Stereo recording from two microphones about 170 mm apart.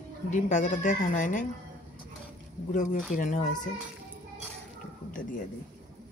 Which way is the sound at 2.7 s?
50° left (ahead or behind).